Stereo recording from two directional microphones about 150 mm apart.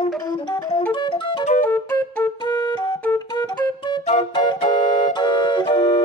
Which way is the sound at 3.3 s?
30° left (ahead or behind).